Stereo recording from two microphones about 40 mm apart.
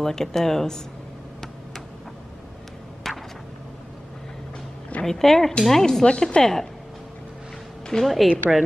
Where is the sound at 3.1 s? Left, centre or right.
Centre.